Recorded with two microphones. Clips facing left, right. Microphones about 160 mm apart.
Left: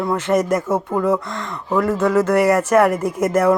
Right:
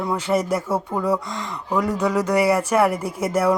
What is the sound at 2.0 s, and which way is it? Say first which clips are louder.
Speech: left 7 dB; 10° right (ahead or behind).